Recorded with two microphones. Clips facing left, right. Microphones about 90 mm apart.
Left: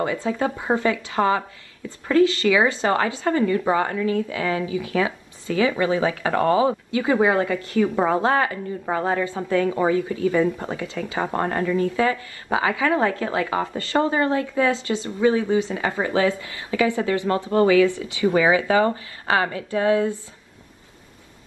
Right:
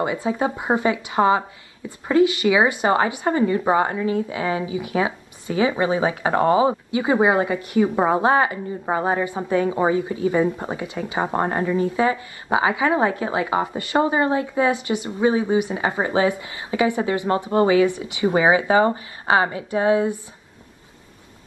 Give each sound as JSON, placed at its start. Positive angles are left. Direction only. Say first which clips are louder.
{"t": 0.0, "sound": "a woman's voice", "louder": "right 1 dB", "side_deg": -20}